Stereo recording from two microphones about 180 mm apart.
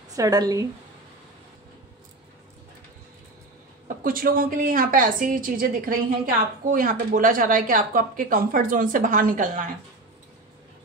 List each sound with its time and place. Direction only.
0.1 s a woman's voice: 20° right (ahead or behind)
3.8 s speech: 50° right (ahead or behind)